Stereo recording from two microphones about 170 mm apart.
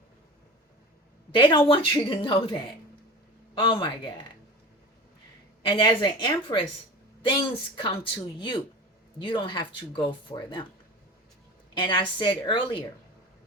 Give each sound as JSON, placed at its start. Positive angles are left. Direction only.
{"t": 1.4, "sound": "speech", "side_deg": 30}
{"t": 5.6, "sound": "speech", "side_deg": 25}
{"t": 7.8, "sound": "speech", "side_deg": 30}
{"t": 11.7, "sound": "speech", "side_deg": 25}